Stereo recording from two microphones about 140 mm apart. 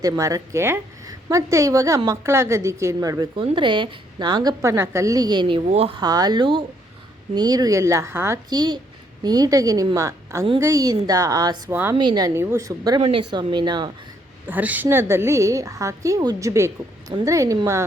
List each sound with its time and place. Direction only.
0.0 s a woman's voice: 25° right (ahead or behind)
3.3 s a woman's voice: 35° right (ahead or behind)
6.0 s a woman's voice: 30° right (ahead or behind)
8.4 s a woman's voice: 30° right (ahead or behind)
11.7 s a woman's voice: 15° right (ahead or behind)
11.9 s a woman's voice: 30° right (ahead or behind)
13.0 s a woman's voice: 40° right (ahead or behind)
14.4 s a woman's voice: 10° right (ahead or behind)